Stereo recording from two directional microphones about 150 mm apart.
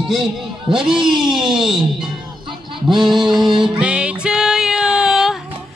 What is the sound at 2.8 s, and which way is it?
Music, centre (ahead or behind).